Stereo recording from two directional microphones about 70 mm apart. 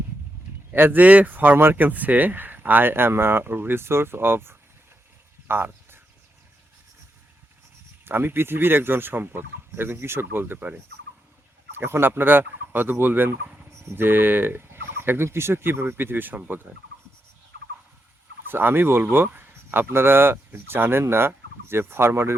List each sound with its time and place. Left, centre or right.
0.7 s speech: right
5.5 s a sound: right
8.0 s speech: right
11.8 s speech: right
18.4 s speech: right